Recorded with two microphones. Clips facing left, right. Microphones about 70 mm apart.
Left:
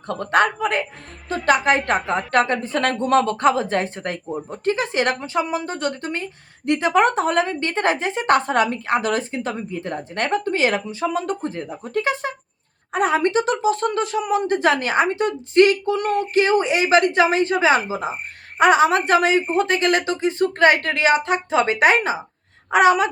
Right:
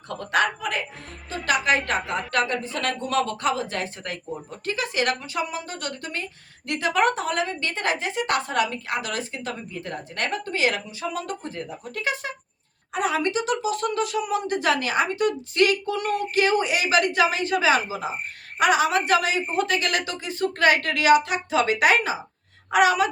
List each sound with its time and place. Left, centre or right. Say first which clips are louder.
0.1 s a woman's voice: left 5 dB; left